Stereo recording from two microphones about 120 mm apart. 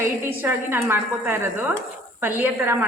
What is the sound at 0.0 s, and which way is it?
A woman's voice, 20° right (ahead or behind).